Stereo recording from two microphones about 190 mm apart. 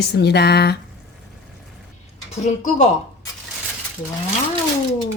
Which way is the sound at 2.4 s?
40° left (ahead or behind).